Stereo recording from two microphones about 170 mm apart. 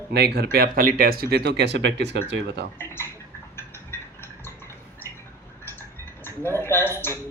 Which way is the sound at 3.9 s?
15° left (ahead or behind).